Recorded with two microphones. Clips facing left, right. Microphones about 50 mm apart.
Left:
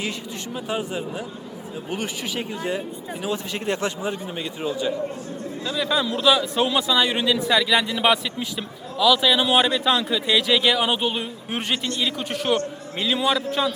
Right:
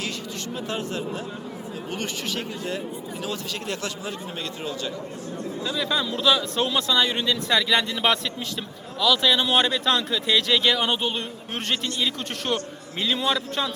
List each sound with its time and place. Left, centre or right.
0.5 s speech: centre
3.2 s a man's voice: left
5.6 s a man's voice: centre